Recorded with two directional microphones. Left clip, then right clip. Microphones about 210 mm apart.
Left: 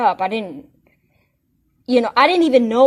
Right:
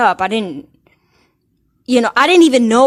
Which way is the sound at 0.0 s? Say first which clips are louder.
Right 4 dB; 30° right (ahead or behind).